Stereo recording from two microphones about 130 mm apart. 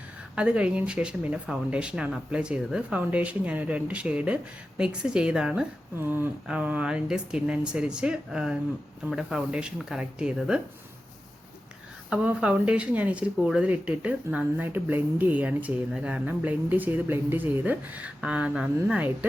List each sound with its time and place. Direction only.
0.3 s speech: 10° right (ahead or behind)
12.1 s speech: 10° right (ahead or behind)